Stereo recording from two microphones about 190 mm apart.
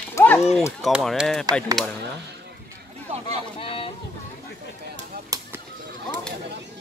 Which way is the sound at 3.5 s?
30° left (ahead or behind).